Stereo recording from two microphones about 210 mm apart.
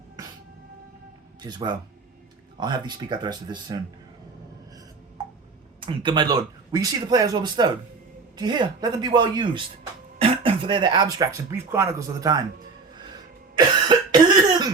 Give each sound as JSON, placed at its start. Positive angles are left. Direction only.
{"t": 1.4, "sound": "speech", "side_deg": -20}
{"t": 5.8, "sound": "speech", "side_deg": -25}
{"t": 13.6, "sound": "cough", "side_deg": -20}